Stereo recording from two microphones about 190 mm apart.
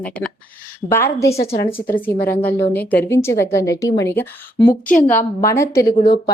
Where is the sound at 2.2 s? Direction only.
10° left (ahead or behind).